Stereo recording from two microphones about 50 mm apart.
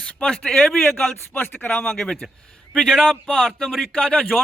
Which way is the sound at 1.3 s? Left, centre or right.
Left.